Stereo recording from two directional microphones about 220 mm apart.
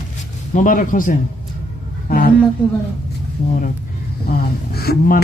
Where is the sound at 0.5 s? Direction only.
35° left (ahead or behind).